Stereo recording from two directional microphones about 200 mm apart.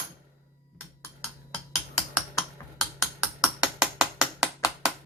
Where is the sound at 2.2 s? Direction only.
Centre (ahead or behind).